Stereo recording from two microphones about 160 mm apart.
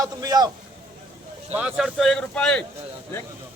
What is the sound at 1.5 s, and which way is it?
Speech, 5° right (ahead or behind).